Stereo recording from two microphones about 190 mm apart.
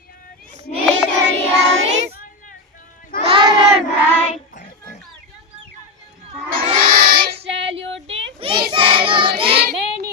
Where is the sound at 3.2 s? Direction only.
25° right (ahead or behind).